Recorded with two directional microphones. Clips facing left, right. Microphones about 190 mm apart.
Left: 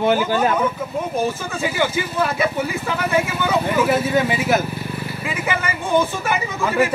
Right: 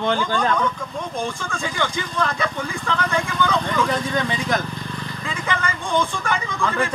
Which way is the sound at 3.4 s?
5° left (ahead or behind).